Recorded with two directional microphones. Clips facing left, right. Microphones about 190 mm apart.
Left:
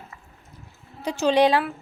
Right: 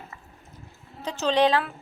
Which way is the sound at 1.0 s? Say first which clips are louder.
Left 3 dB; 10° left (ahead or behind).